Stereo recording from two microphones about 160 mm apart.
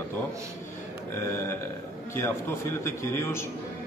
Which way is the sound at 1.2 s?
15° left (ahead or behind).